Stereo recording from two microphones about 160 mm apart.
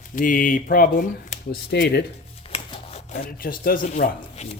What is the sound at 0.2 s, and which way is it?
Speech, 60° left (ahead or behind).